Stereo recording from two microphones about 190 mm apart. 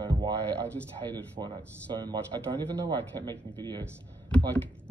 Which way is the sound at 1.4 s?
25° right (ahead or behind).